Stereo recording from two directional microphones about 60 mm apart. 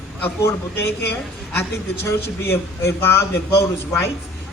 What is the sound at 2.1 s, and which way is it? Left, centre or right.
A man's voice, left.